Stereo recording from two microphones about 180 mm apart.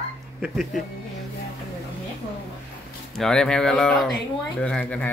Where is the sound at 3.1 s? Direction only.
5° left (ahead or behind).